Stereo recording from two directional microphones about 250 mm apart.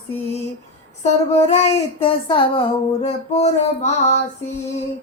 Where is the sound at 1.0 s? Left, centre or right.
Left.